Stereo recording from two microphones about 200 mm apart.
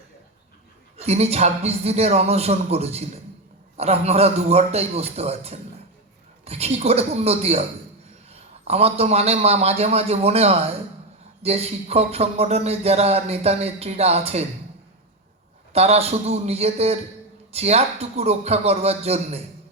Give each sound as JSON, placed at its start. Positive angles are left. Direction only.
{"t": 0.9, "sound": "speech", "side_deg": -30}
{"t": 15.7, "sound": "speech", "side_deg": -30}